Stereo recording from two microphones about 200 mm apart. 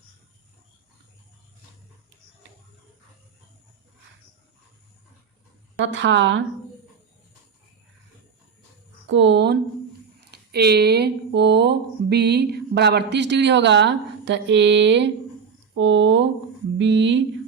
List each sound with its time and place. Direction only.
5.8 s speech: 65° right (ahead or behind)
9.0 s speech: 65° right (ahead or behind)